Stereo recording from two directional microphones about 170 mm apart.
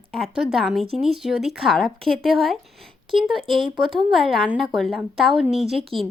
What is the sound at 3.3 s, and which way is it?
Speech, 30° right (ahead or behind).